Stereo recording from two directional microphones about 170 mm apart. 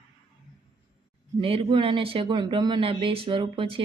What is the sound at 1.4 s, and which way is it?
A woman's voice, 30° right (ahead or behind).